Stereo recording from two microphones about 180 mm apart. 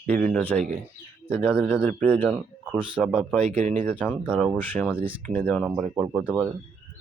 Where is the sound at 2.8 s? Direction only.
5° right (ahead or behind).